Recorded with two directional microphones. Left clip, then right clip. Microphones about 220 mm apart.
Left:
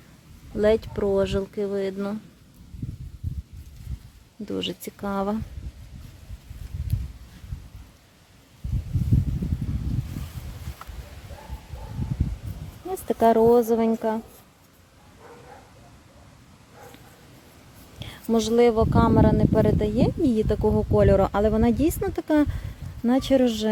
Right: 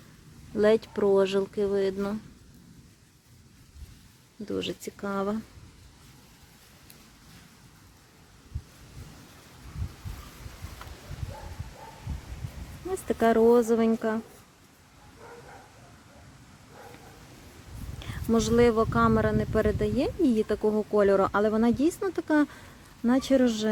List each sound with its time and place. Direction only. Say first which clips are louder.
0.5 s speech: left 2 dB; centre (ahead or behind)
4.4 s speech: left 2 dB; 5° left (ahead or behind)
13.1 s speech: left 4 dB; 5° left (ahead or behind)
18.0 s speech: left 3 dB; 5° left (ahead or behind)